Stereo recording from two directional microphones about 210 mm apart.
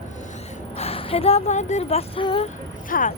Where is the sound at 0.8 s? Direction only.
30° left (ahead or behind).